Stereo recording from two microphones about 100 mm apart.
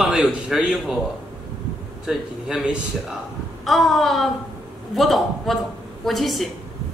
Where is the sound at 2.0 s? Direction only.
10° right (ahead or behind).